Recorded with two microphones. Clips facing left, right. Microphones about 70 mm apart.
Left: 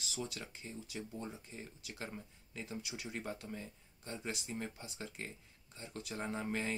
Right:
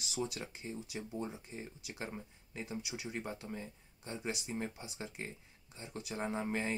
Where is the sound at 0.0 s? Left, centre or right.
Centre.